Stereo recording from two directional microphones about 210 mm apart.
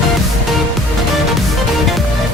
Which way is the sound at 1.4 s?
Centre (ahead or behind).